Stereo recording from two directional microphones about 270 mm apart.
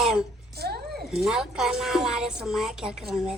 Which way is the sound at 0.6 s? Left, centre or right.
Right.